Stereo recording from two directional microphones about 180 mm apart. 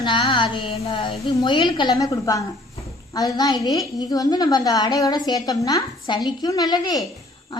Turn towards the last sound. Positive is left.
turn(degrees=20)  # may be behind; listen again after turning